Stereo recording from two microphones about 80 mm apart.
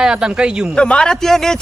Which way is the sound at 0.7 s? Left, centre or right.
Centre.